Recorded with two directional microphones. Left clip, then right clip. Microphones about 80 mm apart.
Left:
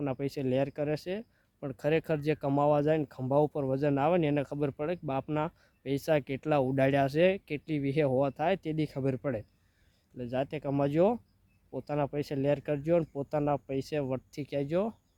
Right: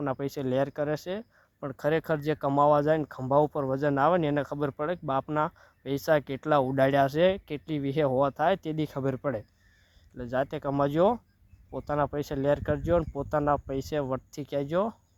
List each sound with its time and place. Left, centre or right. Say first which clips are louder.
0.0 s speech: right 2 dB; left